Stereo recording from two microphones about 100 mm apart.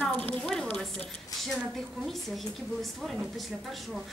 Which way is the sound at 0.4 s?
10° left (ahead or behind).